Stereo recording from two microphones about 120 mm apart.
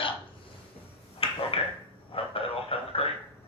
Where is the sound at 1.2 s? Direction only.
55° left (ahead or behind).